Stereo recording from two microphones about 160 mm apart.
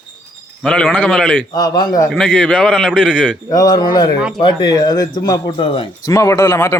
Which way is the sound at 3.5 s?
25° left (ahead or behind).